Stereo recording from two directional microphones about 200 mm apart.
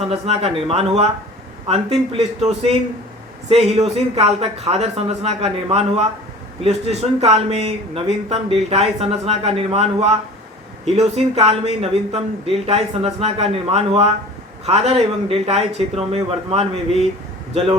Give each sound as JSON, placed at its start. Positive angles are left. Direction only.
{"t": 0.0, "sound": "speech", "side_deg": -30}
{"t": 3.8, "sound": "a man's voice", "side_deg": -30}